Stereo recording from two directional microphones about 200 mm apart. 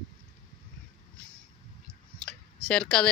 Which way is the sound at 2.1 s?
5° left (ahead or behind).